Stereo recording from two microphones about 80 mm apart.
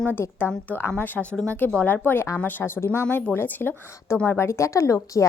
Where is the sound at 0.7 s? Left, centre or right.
Left.